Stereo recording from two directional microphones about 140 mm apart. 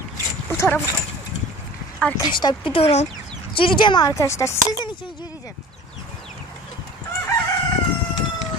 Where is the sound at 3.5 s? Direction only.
40° left (ahead or behind).